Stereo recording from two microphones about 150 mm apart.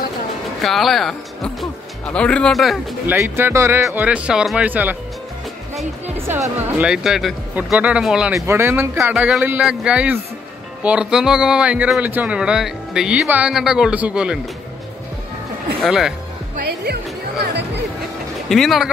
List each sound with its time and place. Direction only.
0.6 s speech: centre (ahead or behind)
3.1 s speech: 15° right (ahead or behind)
6.1 s speech: 15° right (ahead or behind)
8.4 s speech: 15° right (ahead or behind)
15.8 s speech: 5° right (ahead or behind)
16.6 s speech: 90° right
18.5 s speech: centre (ahead or behind)